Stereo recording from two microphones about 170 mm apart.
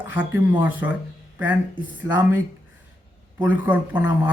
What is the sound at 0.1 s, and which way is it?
Speech, 10° right (ahead or behind).